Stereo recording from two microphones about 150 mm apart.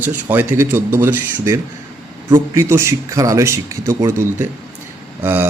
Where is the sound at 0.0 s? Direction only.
15° right (ahead or behind).